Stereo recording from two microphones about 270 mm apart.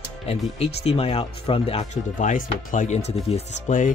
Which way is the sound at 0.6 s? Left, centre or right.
Left.